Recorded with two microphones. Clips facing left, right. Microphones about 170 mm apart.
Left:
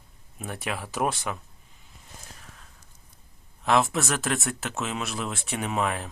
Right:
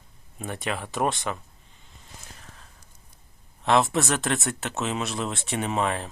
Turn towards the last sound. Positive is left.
turn(degrees=0)  # may be behind; listen again after turning